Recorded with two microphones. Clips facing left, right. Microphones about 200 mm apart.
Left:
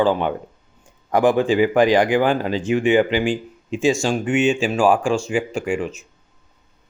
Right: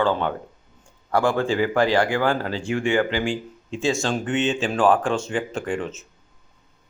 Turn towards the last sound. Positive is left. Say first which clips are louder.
# left 4 dB
turn(degrees=10)  # may be behind; listen again after turning